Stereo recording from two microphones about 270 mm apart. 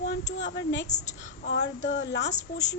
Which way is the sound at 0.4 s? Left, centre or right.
Left.